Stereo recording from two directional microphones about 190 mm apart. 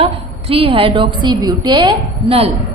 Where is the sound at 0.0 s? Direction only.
30° right (ahead or behind).